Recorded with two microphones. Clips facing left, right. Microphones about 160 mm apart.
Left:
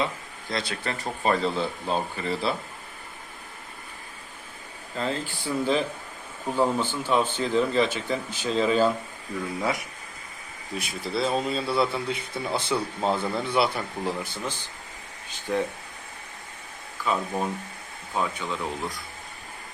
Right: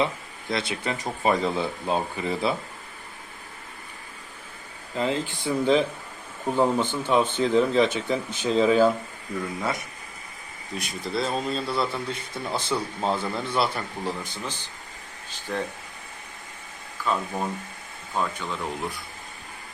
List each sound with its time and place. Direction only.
0.5 s speech: 20° right (ahead or behind)
4.9 s speech: 15° right (ahead or behind)
10.8 s a man's voice: centre (ahead or behind)
17.1 s a man's voice: 5° left (ahead or behind)